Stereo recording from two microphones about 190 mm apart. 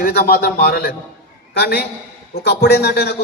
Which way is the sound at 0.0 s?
55° left (ahead or behind).